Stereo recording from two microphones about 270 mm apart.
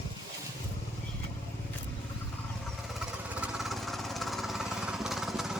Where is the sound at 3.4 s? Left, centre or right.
Centre.